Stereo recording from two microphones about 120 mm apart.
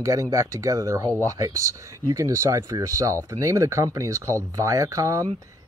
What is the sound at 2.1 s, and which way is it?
Speech, 25° right (ahead or behind).